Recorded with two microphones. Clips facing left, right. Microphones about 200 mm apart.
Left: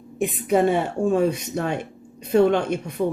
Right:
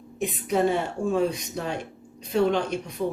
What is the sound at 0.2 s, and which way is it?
Speech, 55° left (ahead or behind).